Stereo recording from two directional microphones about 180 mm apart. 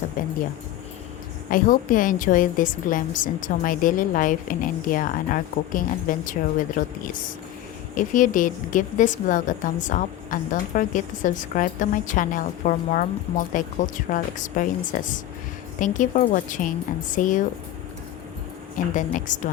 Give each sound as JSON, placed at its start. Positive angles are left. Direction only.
{"t": 0.2, "sound": "a woman's voice", "side_deg": 50}
{"t": 1.5, "sound": "a woman's voice", "side_deg": 50}
{"t": 7.9, "sound": "a woman's voice", "side_deg": 45}
{"t": 18.9, "sound": "a woman's voice", "side_deg": 45}